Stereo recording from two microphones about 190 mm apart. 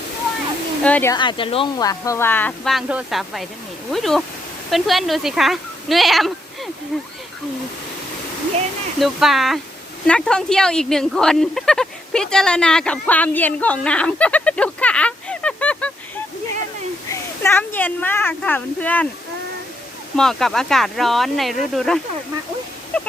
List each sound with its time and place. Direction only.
0.8 s speech: 5° left (ahead or behind)
1.1 s speech: 25° left (ahead or behind)
2.7 s speech: centre (ahead or behind)
9.0 s speech: centre (ahead or behind)
17.1 s speech: 10° left (ahead or behind)
20.1 s speech: centre (ahead or behind)